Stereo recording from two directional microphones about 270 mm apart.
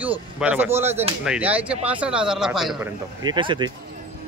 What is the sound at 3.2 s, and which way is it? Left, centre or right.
Speech, centre.